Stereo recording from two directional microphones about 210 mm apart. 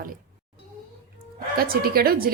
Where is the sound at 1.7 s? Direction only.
45° right (ahead or behind).